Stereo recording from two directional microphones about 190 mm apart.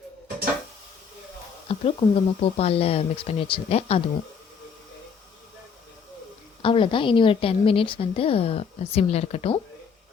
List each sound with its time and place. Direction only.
1.6 s speech: 30° left (ahead or behind)
6.6 s a woman's voice: 25° left (ahead or behind)